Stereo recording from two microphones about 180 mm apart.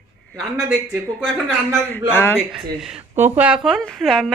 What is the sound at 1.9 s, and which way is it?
Speech, 10° left (ahead or behind).